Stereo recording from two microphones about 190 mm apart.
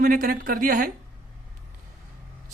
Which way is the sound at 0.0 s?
50° right (ahead or behind).